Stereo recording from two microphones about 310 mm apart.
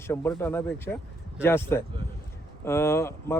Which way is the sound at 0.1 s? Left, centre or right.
Centre.